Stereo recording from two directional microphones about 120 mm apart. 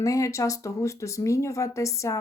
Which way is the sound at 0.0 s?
25° left (ahead or behind).